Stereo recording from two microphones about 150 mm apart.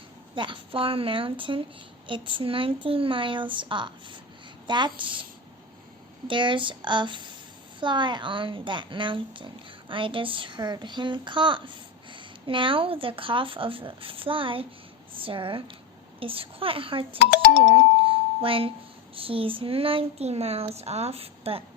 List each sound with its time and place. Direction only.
0.3 s speech: 35° right (ahead or behind)
6.2 s speech: 35° right (ahead or behind)
17.7 s a sound: 35° right (ahead or behind)
19.1 s speech: 35° right (ahead or behind)